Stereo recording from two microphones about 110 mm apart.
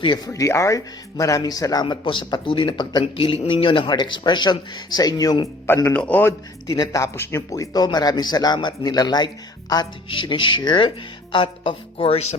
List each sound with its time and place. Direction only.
0.0 s a man's voice: 40° left (ahead or behind)
0.3 s a man's voice: 25° left (ahead or behind); by 3.0 s 45° left (ahead or behind)
3.0 s a man's voice: 55° left (ahead or behind); by 5.4 s 35° left (ahead or behind)
5.6 s speech: 20° left (ahead or behind)
6.7 s a man's voice: 30° left (ahead or behind)
10.1 s a man's voice: 50° left (ahead or behind); by 12.4 s 75° left (ahead or behind)